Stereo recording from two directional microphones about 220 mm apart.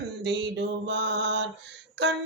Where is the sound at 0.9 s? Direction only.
50° right (ahead or behind).